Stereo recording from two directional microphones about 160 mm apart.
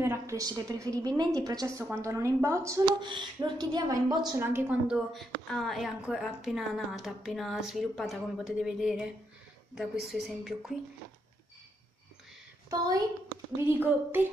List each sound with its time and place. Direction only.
0.0 s a woman's voice: 15° right (ahead or behind)
3.0 s a woman's voice: 30° right (ahead or behind)
4.4 s a woman's voice: 15° right (ahead or behind)
13.6 s a woman's voice: 15° right (ahead or behind)